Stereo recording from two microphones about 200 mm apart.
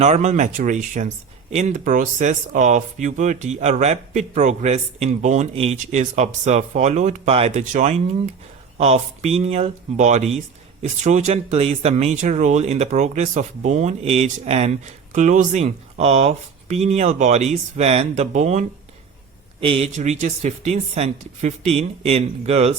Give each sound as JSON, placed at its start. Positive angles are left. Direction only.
{"t": 0.0, "sound": "speech", "side_deg": -35}
{"t": 19.6, "sound": "speech", "side_deg": -30}